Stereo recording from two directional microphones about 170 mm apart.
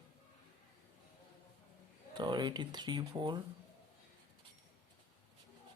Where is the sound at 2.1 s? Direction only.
25° right (ahead or behind).